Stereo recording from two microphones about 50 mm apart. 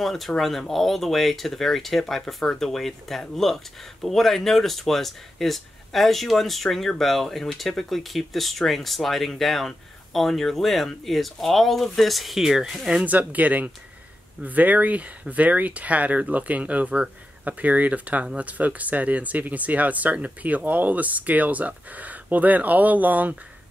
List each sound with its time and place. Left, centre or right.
0.0 s speech: centre
13.0 s speech: right